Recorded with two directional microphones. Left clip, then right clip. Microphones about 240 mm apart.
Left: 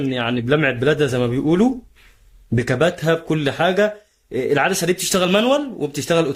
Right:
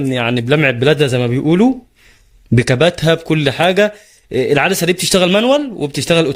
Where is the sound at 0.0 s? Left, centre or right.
Right.